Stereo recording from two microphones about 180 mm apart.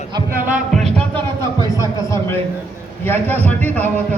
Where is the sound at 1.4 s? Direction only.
15° left (ahead or behind).